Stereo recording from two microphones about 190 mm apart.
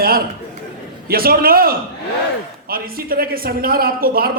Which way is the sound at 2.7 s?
50° right (ahead or behind).